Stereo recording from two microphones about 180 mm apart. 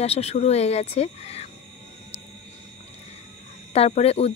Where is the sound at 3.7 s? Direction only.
35° left (ahead or behind).